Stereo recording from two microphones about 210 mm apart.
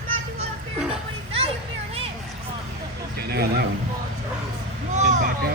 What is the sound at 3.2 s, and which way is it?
Vehicle, 50° right (ahead or behind).